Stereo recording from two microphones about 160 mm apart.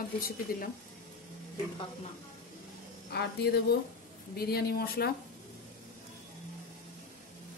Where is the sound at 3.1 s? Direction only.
90° left.